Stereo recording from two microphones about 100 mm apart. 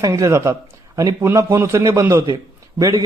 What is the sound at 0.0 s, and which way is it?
A man's voice, 35° right (ahead or behind).